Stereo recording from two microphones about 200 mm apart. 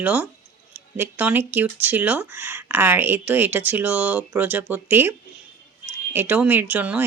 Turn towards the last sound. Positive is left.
turn(degrees=-5)  # may be behind; listen again after turning